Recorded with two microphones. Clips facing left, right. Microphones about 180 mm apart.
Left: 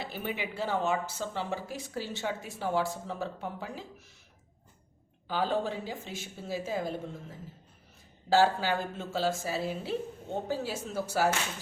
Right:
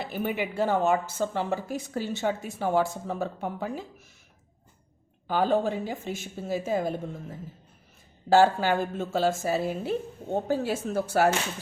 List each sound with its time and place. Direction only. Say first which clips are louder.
0.0 s speech: right 6 dB; 50° right (ahead or behind)
5.3 s speech: right 6 dB; 50° right (ahead or behind)
8.3 s speech: right 5 dB; 50° right (ahead or behind)